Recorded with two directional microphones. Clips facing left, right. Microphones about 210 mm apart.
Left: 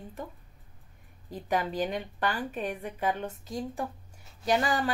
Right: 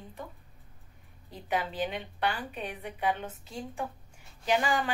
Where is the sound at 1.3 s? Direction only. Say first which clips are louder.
Left 3 dB; 45° left (ahead or behind).